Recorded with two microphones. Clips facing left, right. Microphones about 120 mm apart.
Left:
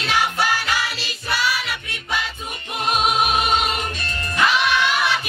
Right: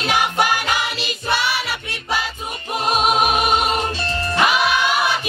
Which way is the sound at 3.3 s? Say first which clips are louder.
Right 2 dB; 30° right (ahead or behind).